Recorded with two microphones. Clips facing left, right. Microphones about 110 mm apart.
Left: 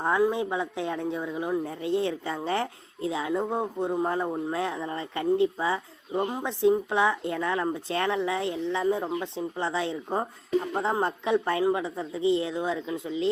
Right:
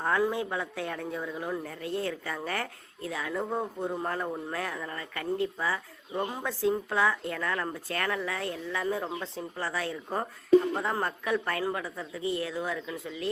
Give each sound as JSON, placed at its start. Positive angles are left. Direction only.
{"t": 0.0, "sound": "speech", "side_deg": 15}